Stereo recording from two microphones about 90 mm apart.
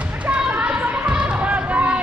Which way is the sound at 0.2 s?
15° right (ahead or behind).